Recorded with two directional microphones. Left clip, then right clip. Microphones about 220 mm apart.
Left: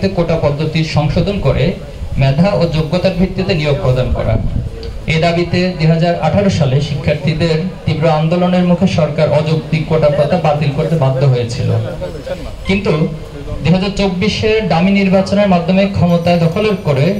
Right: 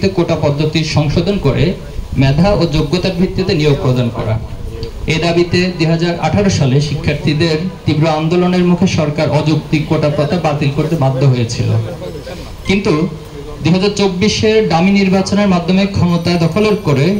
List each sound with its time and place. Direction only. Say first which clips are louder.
0.0 s a man's voice: even; 50° right (ahead or behind)
5.0 s a man's voice: even; 50° right (ahead or behind)
12.7 s a man's voice: right 1 dB; 50° right (ahead or behind)